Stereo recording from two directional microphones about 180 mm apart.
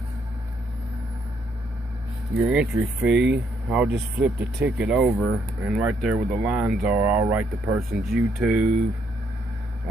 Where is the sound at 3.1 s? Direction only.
75° right (ahead or behind).